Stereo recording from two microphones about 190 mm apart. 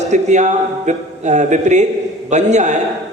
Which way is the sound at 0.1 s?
40° right (ahead or behind).